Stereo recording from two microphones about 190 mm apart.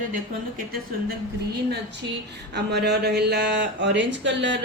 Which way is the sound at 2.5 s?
60° right (ahead or behind).